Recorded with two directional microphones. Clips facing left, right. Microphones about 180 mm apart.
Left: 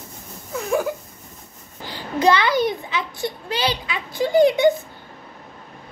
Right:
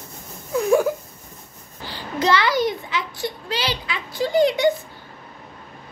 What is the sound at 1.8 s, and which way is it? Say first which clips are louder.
A child's voice: left 4 dB; 15° left (ahead or behind).